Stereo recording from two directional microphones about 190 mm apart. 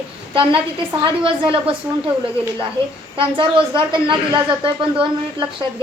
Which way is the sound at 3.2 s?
25° right (ahead or behind).